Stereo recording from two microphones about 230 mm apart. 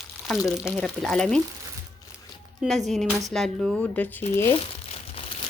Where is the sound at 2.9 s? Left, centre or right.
Centre.